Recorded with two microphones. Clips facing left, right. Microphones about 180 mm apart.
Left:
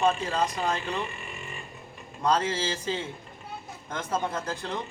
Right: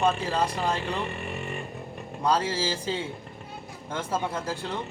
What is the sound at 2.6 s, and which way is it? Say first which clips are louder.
A man's voice: right 2 dB; 10° right (ahead or behind).